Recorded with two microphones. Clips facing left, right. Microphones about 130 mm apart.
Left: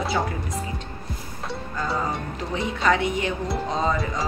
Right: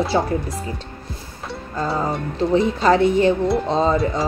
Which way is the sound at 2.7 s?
35° right (ahead or behind).